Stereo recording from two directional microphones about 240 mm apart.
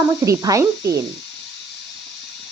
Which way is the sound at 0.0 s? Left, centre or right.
Centre.